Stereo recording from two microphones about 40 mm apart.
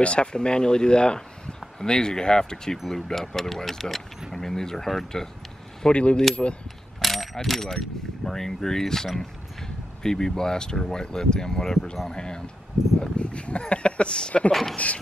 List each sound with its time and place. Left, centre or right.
0.0 s speech: left; by 5.3 s centre
5.9 s speech: left
7.0 s mechanisms: centre
7.3 s speech: centre; by 14.4 s left
14.5 s speech: centre